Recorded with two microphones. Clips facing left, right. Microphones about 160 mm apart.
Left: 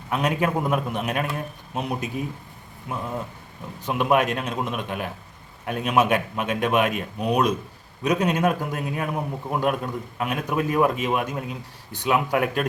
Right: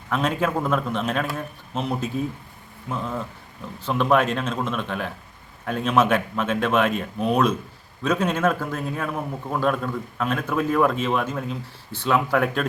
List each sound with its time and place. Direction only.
0.1 s a man's voice: 15° left (ahead or behind)